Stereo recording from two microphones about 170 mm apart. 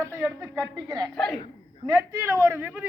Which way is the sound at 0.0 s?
15° right (ahead or behind).